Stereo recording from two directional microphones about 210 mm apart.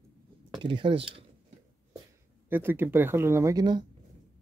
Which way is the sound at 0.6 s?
25° right (ahead or behind).